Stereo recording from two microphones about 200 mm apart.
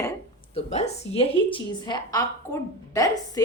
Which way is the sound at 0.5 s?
30° left (ahead or behind).